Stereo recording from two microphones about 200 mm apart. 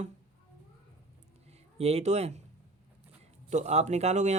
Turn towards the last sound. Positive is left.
turn(degrees=-35)  # may be behind; listen again after turning